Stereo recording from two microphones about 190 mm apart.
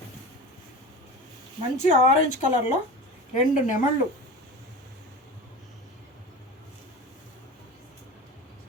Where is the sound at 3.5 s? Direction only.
45° left (ahead or behind).